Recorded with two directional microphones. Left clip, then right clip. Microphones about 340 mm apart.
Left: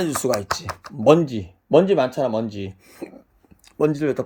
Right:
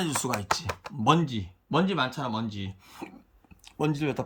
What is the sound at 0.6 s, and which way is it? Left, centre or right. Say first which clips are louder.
Speech: left 8 dB; centre.